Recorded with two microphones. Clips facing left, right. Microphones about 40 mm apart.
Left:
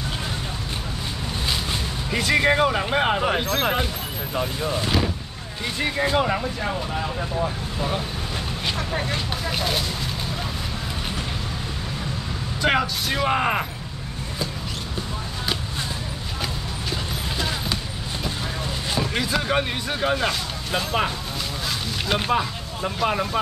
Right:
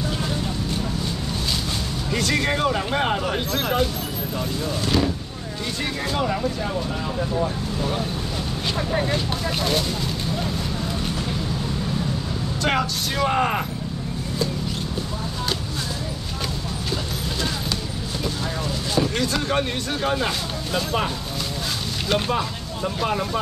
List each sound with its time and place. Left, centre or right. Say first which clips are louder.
2.0 s speech: left 3 dB; centre
8.9 s speech: right 3 dB; centre
12.6 s speech: left 2 dB; centre
18.9 s speech: right 2 dB; centre
22.1 s speech: even; centre